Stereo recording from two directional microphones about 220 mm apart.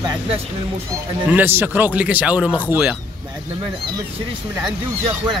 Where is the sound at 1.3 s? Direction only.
10° right (ahead or behind).